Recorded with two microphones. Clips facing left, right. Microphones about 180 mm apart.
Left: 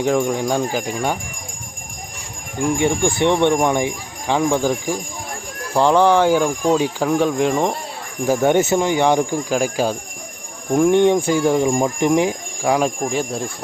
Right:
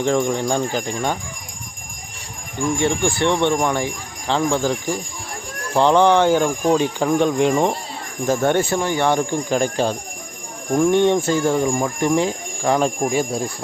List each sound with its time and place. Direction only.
0.0 s speech: 5° left (ahead or behind)
2.7 s speech: 15° left (ahead or behind); by 7.8 s centre (ahead or behind)
8.3 s speech: 15° left (ahead or behind)
13.1 s speech: 5° right (ahead or behind)